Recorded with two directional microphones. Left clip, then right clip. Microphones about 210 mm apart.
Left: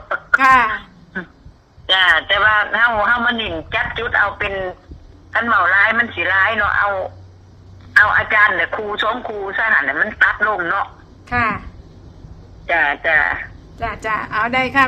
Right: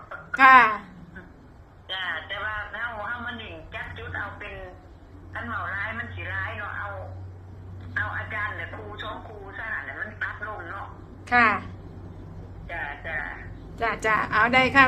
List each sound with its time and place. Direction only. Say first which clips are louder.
0.3 s a sound: left 3 dB; 10° left (ahead or behind)
1.9 s a sound: left 17 dB; 55° left (ahead or behind)
5.3 s speech: left 17 dB; 55° left (ahead or behind)
11.3 s speech: left 1 dB; 5° left (ahead or behind)
12.6 s speech: left 17 dB; 55° left (ahead or behind)
13.7 s speech: left 2 dB; 5° left (ahead or behind)